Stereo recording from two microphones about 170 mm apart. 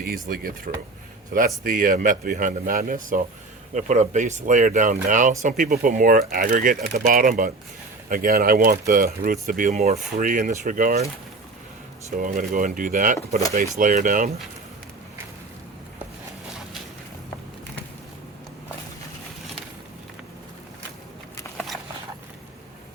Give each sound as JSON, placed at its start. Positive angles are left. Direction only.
{"t": 0.0, "sound": "a man's voice", "side_deg": -60}
{"t": 3.8, "sound": "speech", "side_deg": -45}
{"t": 12.1, "sound": "speech", "side_deg": -50}